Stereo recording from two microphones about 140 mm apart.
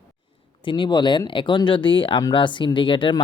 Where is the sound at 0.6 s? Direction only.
35° left (ahead or behind).